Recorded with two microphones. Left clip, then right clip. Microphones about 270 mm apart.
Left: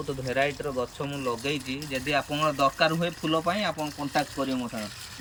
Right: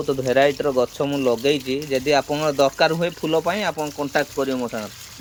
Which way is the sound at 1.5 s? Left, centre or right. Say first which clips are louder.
Right 10 dB; centre.